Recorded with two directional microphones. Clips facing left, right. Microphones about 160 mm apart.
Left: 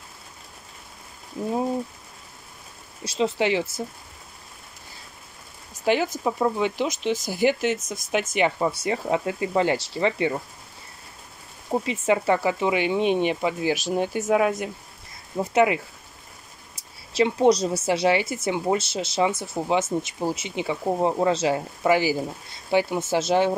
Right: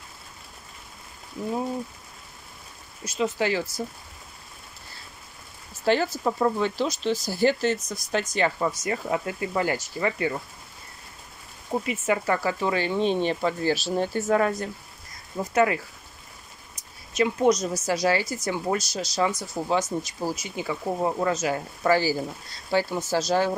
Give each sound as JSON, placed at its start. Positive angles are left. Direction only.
{"t": 3.2, "sound": "speech", "side_deg": 25}
{"t": 5.7, "sound": "speech", "side_deg": 15}
{"t": 11.7, "sound": "speech", "side_deg": 25}